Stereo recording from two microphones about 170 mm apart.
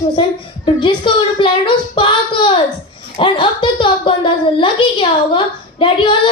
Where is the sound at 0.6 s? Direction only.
30° left (ahead or behind).